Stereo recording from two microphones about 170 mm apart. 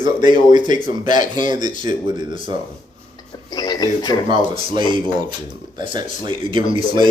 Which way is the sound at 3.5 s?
25° left (ahead or behind).